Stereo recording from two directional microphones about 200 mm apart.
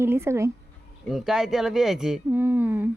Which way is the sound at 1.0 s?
Centre (ahead or behind).